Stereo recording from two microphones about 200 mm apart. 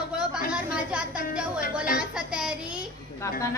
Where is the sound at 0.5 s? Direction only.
5° right (ahead or behind).